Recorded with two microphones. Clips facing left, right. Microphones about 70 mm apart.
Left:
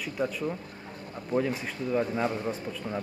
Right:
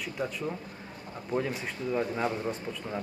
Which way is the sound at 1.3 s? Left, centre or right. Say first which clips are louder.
Left 3 dB; left.